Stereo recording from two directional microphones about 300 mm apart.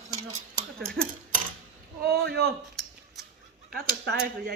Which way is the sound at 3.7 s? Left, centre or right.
Right.